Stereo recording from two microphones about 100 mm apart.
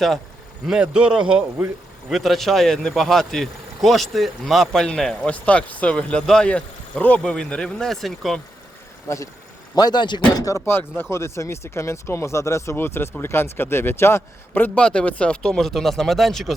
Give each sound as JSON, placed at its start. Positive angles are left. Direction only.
{"t": 0.7, "sound": "a man's voice", "side_deg": -10}
{"t": 9.0, "sound": "speech", "side_deg": 30}
{"t": 9.7, "sound": "speech", "side_deg": 45}
{"t": 10.4, "sound": "speech", "side_deg": 25}